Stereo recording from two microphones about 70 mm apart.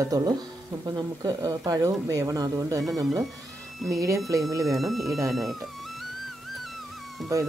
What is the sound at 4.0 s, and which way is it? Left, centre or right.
Speech, right.